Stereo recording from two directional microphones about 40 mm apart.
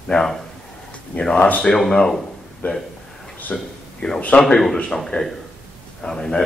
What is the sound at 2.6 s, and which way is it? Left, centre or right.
Speech, left.